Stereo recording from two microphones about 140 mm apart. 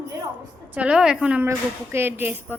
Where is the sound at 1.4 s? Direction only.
15° right (ahead or behind).